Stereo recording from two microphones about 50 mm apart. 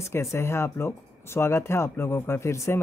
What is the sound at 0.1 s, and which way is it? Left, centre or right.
Speech, left.